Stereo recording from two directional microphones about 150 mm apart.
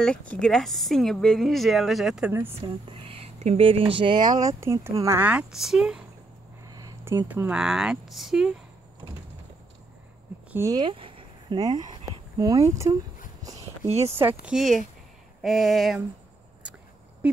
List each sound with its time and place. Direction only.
0.0 s speech: 5° left (ahead or behind); by 2.5 s 10° right (ahead or behind)
2.6 s speech: 40° right (ahead or behind)
4.4 s speech: 20° right (ahead or behind); by 6.0 s 5° right (ahead or behind)
6.6 s a sound: 25° right (ahead or behind)
7.2 s speech: 10° right (ahead or behind)
9.0 s a sound: 20° right (ahead or behind)
10.5 s speech: 20° right (ahead or behind)
10.9 s a sound: 35° right (ahead or behind)
12.4 s speech: 25° right (ahead or behind)
13.8 s speech: 45° right (ahead or behind)
14.4 s speech: centre (ahead or behind)